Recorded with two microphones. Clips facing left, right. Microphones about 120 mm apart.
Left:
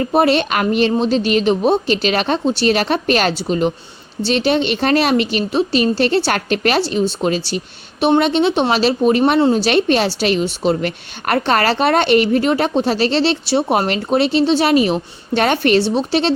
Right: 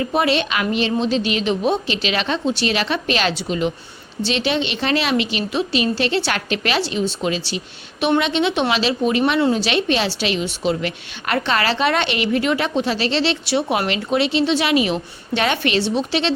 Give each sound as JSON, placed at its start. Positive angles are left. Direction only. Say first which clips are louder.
{"t": 0.0, "sound": "a woman's voice", "louder": "left 4 dB", "side_deg": 40}